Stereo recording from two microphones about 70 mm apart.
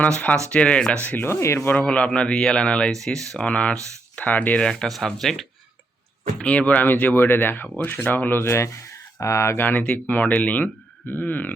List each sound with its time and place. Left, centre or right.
0.0 s speech: centre
1.3 s speech: left
1.7 s speech: centre
2.9 s speech: centre
3.4 s speech: centre
4.6 s speech: centre
6.4 s speech: centre; by 9.6 s left
9.6 s speech: left